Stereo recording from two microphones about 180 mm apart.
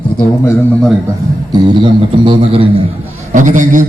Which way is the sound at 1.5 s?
25° right (ahead or behind).